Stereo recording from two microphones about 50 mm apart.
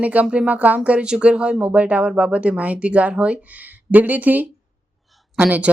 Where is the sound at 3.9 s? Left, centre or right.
Right.